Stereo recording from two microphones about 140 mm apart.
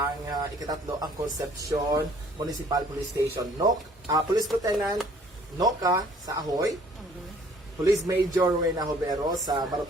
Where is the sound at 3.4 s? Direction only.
25° right (ahead or behind).